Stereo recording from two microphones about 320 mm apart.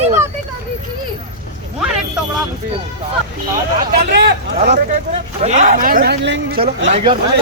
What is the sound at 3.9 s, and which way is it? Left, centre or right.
Speech, right.